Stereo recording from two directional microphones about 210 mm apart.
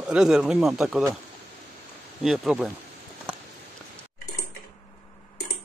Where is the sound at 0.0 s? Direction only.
5° right (ahead or behind).